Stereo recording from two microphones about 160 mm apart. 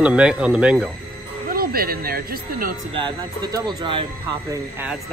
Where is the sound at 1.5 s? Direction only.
70° right (ahead or behind).